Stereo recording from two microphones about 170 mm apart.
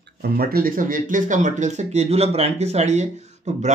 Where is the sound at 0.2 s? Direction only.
65° right (ahead or behind).